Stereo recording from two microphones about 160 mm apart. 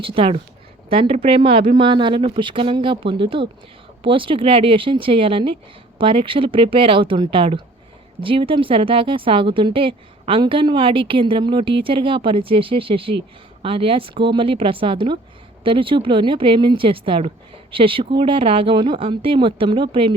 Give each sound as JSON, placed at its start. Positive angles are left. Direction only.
{"t": 0.0, "sound": "speech", "side_deg": -35}